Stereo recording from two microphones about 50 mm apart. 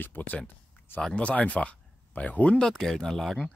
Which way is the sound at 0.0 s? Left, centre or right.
Left.